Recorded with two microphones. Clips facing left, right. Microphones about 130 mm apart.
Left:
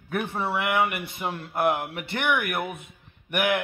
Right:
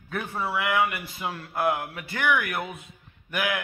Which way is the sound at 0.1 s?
20° left (ahead or behind).